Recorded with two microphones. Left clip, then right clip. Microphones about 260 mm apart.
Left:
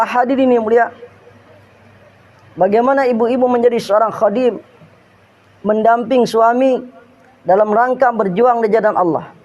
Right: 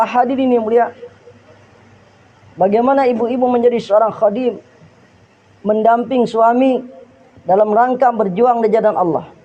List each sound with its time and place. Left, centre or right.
0.0 s a man's voice: left
2.6 s a man's voice: left
5.6 s a man's voice: left